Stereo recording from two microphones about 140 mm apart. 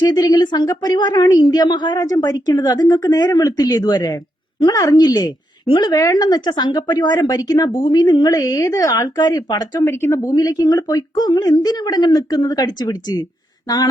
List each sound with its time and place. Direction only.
0.1 s speech: 30° left (ahead or behind)